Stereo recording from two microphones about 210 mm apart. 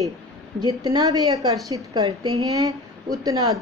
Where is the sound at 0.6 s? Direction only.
20° right (ahead or behind).